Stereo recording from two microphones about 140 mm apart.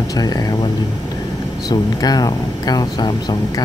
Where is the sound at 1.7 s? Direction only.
30° left (ahead or behind).